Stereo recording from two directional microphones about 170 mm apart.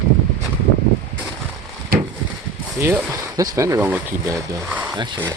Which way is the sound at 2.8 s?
10° right (ahead or behind).